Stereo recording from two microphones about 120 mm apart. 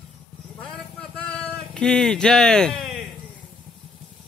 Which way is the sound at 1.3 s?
5° left (ahead or behind).